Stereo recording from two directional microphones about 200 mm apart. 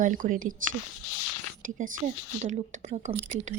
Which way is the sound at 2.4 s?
35° right (ahead or behind).